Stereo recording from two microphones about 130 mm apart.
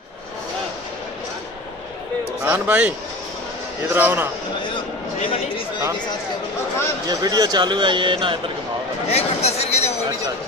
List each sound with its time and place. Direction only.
2.4 s speech: 15° right (ahead or behind)
3.9 s speech: 15° right (ahead or behind)
4.7 s a sound: 45° left (ahead or behind)
7.1 s speech: 30° right (ahead or behind)
9.1 s speech: 55° left (ahead or behind)